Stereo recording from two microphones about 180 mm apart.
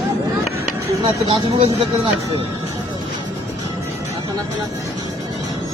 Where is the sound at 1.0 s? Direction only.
30° right (ahead or behind).